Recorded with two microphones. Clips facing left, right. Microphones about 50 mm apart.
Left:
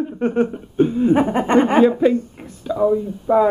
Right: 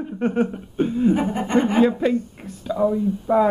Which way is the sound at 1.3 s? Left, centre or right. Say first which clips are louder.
Left 5 dB; left.